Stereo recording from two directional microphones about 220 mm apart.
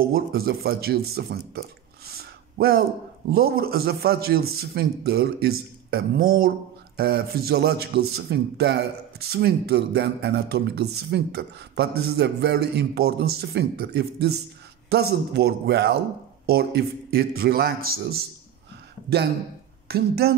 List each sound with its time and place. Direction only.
0.1 s a man's voice: 45° right (ahead or behind)
19.9 s a man's voice: 45° right (ahead or behind)